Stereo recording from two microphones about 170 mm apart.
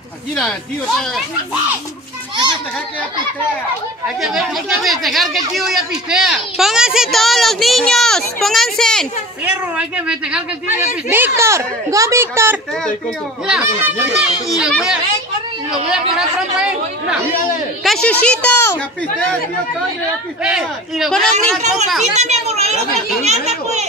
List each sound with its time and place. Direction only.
0.4 s speech: centre (ahead or behind)
4.2 s speech: centre (ahead or behind)
9.4 s a child's voice: 5° right (ahead or behind)
16.2 s speech: 5° right (ahead or behind)
17.8 s speech: 5° left (ahead or behind)
20.4 s speech: 5° right (ahead or behind)
22.1 s a child's voice: 40° right (ahead or behind)